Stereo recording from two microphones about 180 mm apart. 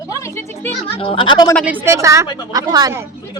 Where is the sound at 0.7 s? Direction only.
30° left (ahead or behind).